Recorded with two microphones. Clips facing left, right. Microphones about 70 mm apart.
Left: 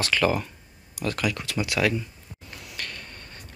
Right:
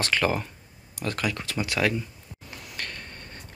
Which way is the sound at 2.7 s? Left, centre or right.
Right.